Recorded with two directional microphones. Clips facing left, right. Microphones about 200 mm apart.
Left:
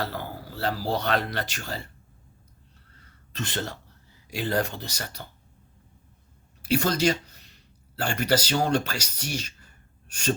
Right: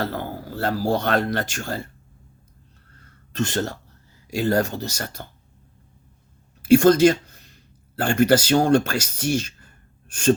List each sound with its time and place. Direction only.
0.0 s speech: 50° right (ahead or behind)
3.0 s a sound: 45° right (ahead or behind)
4.3 s speech: 45° right (ahead or behind)
6.6 s speech: 50° right (ahead or behind)